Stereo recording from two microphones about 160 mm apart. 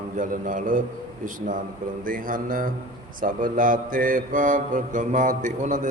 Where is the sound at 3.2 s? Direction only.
60° right (ahead or behind).